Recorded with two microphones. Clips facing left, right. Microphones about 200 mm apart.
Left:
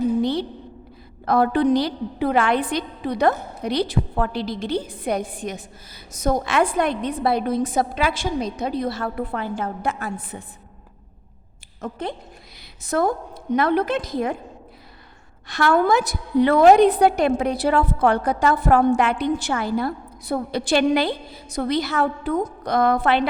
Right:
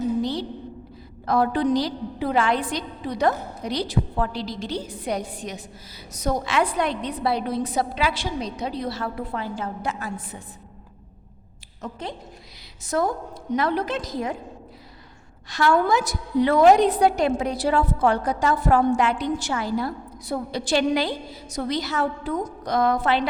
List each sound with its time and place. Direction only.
0.2 s a sound: 60° left (ahead or behind)
1.2 s a woman's voice: 60° left (ahead or behind)
11.8 s a woman's voice: 55° left (ahead or behind)
15.4 s a woman's voice: 55° left (ahead or behind)